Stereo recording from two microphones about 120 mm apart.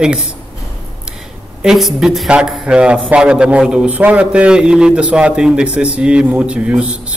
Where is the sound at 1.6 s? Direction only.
5° right (ahead or behind).